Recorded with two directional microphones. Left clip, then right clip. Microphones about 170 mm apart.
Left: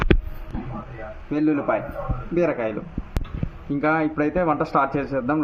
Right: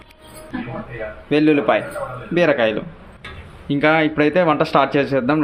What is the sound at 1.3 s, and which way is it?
Speech, 15° right (ahead or behind).